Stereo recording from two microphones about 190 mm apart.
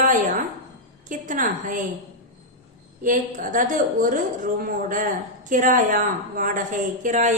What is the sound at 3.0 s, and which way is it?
A woman's voice, 45° right (ahead or behind).